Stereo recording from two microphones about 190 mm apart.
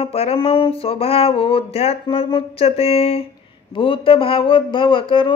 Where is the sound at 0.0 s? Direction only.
30° left (ahead or behind).